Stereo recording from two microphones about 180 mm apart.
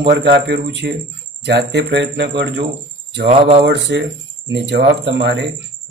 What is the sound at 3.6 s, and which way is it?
Speech, 85° right.